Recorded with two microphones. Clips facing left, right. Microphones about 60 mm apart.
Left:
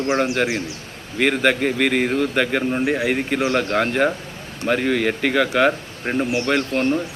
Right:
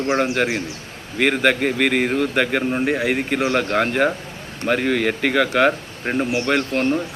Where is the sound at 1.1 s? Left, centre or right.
Centre.